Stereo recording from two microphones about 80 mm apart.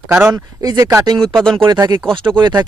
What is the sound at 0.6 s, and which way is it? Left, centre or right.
Speech, right.